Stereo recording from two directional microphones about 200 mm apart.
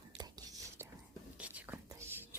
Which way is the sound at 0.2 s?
20° right (ahead or behind).